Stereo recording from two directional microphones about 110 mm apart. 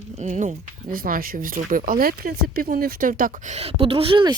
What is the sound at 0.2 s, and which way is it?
Speech, 90° right.